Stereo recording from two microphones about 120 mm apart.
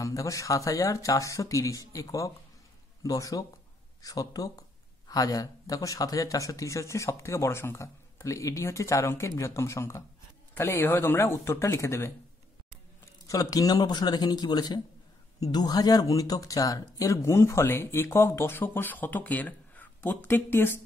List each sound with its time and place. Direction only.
0.0 s speech: 25° left (ahead or behind)
13.3 s a man's voice: 30° left (ahead or behind)